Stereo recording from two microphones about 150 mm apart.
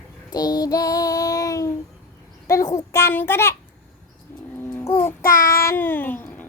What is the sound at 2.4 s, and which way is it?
A child's voice, 20° left (ahead or behind).